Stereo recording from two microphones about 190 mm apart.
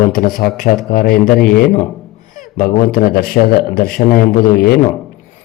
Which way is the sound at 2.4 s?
45° left (ahead or behind).